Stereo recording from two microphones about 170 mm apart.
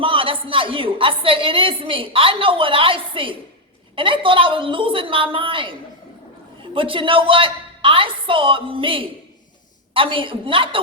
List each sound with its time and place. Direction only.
0.0 s a woman's voice: 30° right (ahead or behind)
6.7 s a woman's voice: 30° right (ahead or behind)